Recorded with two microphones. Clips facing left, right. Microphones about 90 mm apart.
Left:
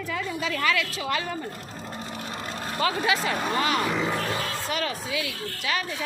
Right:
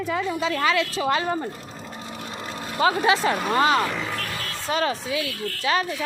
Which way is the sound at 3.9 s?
15° left (ahead or behind).